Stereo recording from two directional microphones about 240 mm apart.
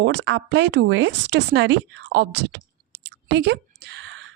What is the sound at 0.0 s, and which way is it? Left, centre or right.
A woman's voice, right.